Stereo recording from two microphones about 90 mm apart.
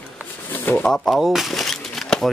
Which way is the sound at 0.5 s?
20° left (ahead or behind).